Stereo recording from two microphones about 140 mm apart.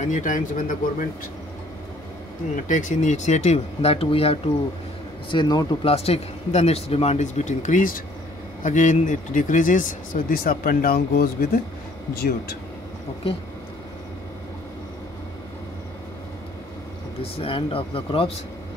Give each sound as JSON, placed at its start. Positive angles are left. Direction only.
{"t": 0.0, "sound": "speech", "side_deg": 60}
{"t": 2.5, "sound": "speech", "side_deg": 65}
{"t": 5.3, "sound": "speech", "side_deg": 30}
{"t": 5.9, "sound": "speech", "side_deg": 45}
{"t": 17.2, "sound": "speech", "side_deg": 40}